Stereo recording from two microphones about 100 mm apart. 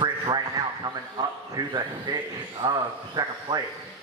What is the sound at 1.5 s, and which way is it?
Speech, 45° right (ahead or behind).